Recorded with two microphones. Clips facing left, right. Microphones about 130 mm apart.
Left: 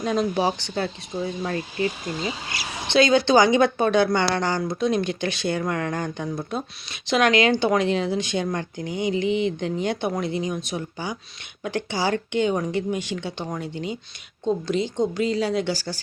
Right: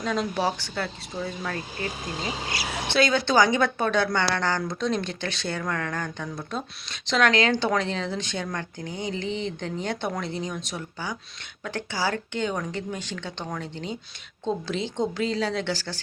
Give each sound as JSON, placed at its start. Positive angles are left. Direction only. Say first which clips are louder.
{"t": 0.0, "sound": "speech", "louder": "left 4 dB", "side_deg": 15}
{"t": 2.9, "sound": "a woman's voice", "louder": "left 5 dB", "side_deg": 20}